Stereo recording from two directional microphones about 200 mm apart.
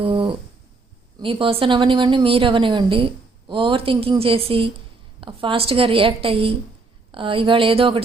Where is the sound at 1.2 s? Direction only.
25° right (ahead or behind).